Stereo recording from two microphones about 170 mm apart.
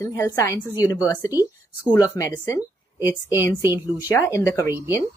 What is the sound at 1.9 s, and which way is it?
A woman's voice, 20° left (ahead or behind).